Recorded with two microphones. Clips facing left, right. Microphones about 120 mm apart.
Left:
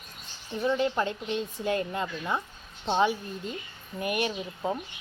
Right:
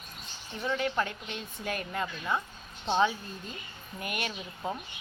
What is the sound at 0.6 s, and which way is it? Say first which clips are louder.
Speech: left 4 dB; 25° left (ahead or behind).